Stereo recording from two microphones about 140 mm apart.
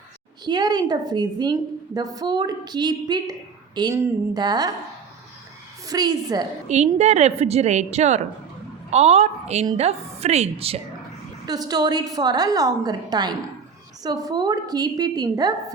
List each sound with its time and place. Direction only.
0.4 s a woman's voice: 30° right (ahead or behind)
5.8 s a woman's voice: 25° right (ahead or behind)
6.7 s a woman's voice: 55° right (ahead or behind)
11.4 s a woman's voice: 30° right (ahead or behind)